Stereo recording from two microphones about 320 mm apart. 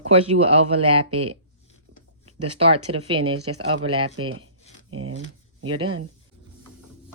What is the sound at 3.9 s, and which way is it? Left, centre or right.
Speech, centre.